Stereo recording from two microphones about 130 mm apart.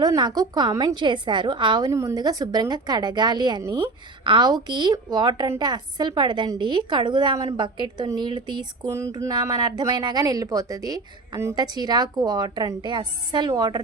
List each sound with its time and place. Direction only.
0.0 s a woman's voice: 35° right (ahead or behind)
0.9 s a woman's voice: 40° right (ahead or behind)
1.9 s a woman's voice: 25° right (ahead or behind)